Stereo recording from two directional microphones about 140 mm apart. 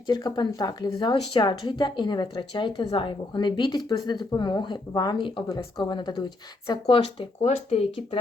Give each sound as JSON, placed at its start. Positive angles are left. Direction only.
{"t": 0.1, "sound": "speech", "side_deg": 30}